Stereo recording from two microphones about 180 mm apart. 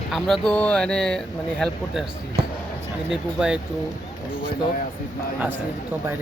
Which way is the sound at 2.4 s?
60° right (ahead or behind).